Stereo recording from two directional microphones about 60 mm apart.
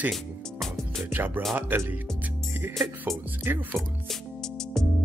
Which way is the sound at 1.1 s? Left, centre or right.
Right.